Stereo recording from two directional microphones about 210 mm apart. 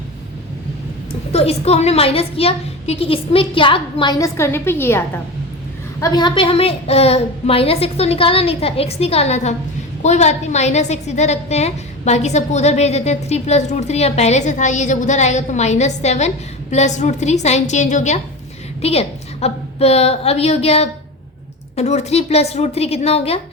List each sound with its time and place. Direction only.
1.3 s a woman's voice: 30° left (ahead or behind)